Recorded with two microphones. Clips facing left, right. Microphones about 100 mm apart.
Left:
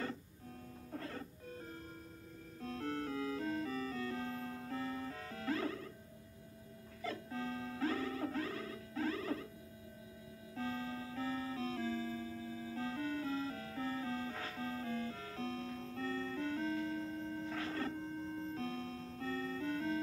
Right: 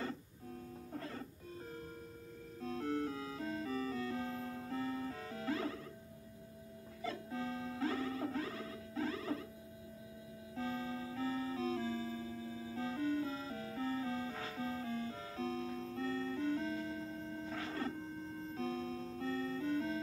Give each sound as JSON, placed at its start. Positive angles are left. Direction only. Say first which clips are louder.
{"t": 0.9, "sound": "music", "louder": "left 1 dB", "side_deg": -30}
{"t": 2.6, "sound": "music", "louder": "right 3 dB", "side_deg": -25}
{"t": 7.0, "sound": "music", "louder": "right 1 dB", "side_deg": -25}
{"t": 10.5, "sound": "music", "louder": "right 1 dB", "side_deg": -25}